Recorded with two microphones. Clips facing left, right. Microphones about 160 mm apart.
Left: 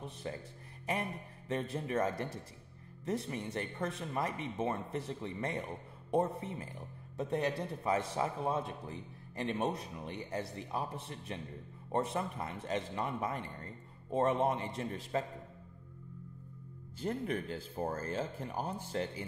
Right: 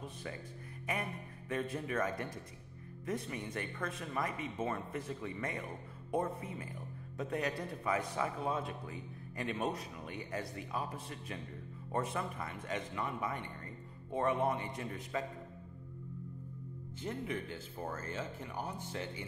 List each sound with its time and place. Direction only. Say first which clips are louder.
0.2 s speech: left 4 dB; 30° left (ahead or behind)
1.5 s a man's voice: left 2 dB; 30° left (ahead or behind)
3.3 s a man's voice: left 2 dB; 30° left (ahead or behind)
17.0 s speech: left 4 dB; 35° left (ahead or behind)